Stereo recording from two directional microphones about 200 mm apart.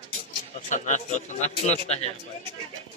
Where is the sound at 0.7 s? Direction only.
40° left (ahead or behind).